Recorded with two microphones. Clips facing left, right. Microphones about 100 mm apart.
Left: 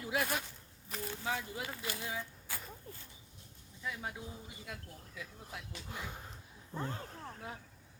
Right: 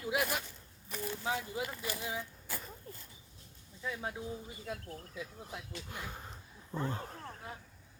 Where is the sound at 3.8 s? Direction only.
25° right (ahead or behind).